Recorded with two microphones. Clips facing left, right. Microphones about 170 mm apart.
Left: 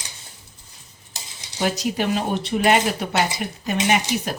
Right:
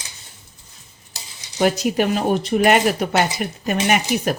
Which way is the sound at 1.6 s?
50° right (ahead or behind).